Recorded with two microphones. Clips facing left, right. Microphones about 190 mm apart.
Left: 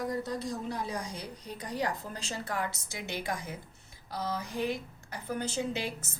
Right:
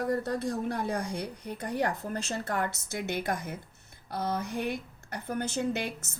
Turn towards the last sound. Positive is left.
turn(degrees=-55)  # may be behind; listen again after turning